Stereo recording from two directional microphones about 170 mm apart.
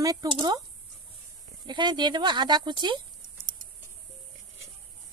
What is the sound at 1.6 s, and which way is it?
Speech, 25° right (ahead or behind).